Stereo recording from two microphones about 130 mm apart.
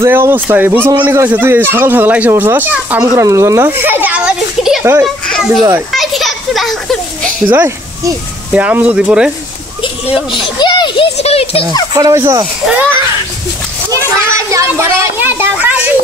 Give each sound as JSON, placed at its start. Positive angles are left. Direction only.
{"t": 0.0, "sound": "a child's voice", "side_deg": -20}
{"t": 5.0, "sound": "children playing", "side_deg": 5}
{"t": 7.5, "sound": "speech", "side_deg": -20}
{"t": 10.3, "sound": "children playing", "side_deg": 35}
{"t": 11.1, "sound": "a sound", "side_deg": 50}
{"t": 11.9, "sound": "speech", "side_deg": -25}
{"t": 13.9, "sound": "children playing", "side_deg": -25}